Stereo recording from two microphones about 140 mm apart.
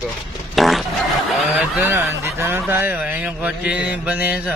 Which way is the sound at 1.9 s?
20° right (ahead or behind).